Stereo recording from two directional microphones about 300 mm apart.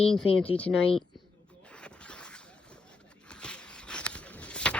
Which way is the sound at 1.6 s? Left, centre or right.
Centre.